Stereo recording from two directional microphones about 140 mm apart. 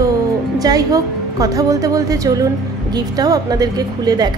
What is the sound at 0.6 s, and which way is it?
A woman's voice, 25° right (ahead or behind).